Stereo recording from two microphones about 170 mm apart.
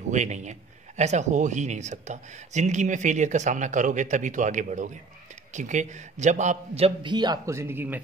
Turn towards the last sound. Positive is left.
turn(degrees=-15)  # may be behind; listen again after turning